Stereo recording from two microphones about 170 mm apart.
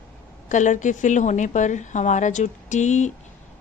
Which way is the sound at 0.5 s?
45° left (ahead or behind).